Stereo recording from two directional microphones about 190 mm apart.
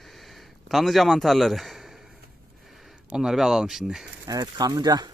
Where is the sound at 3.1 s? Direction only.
5° right (ahead or behind).